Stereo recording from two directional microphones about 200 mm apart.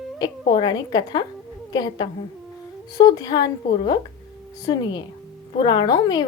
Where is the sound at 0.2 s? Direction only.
25° left (ahead or behind).